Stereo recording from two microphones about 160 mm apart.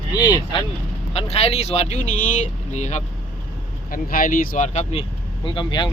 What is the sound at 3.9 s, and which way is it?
Speech, 60° left (ahead or behind).